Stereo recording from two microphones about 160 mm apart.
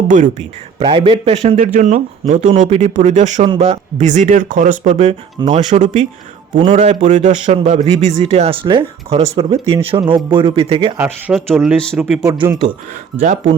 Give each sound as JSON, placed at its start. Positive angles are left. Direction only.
{"t": 0.1, "sound": "a man's voice", "side_deg": -50}
{"t": 0.8, "sound": "a man's voice", "side_deg": -30}
{"t": 10.9, "sound": "speech", "side_deg": -15}
{"t": 11.3, "sound": "speech", "side_deg": 0}
{"t": 12.2, "sound": "speech", "side_deg": -25}
{"t": 13.1, "sound": "a man's voice", "side_deg": -50}